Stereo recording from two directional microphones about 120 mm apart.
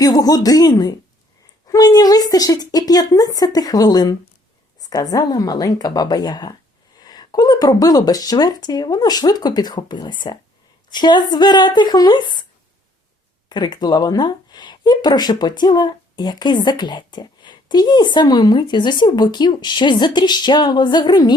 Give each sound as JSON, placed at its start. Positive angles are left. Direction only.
{"t": 0.0, "sound": "speech", "side_deg": 30}
{"t": 13.5, "sound": "speech", "side_deg": 35}